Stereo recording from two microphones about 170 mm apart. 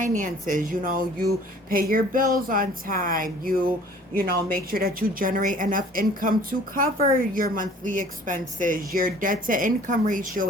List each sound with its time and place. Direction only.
0.0 s a woman's voice: 50° right (ahead or behind)